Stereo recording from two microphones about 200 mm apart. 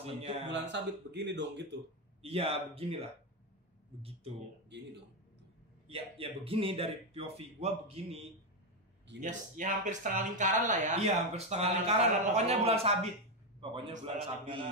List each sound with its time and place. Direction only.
0.0 s speech: 30° right (ahead or behind)
0.5 s speech: 60° right (ahead or behind)
2.2 s speech: 30° right (ahead or behind)
4.7 s speech: 60° right (ahead or behind)
5.9 s speech: 30° right (ahead or behind)
9.2 s speech: 40° right (ahead or behind)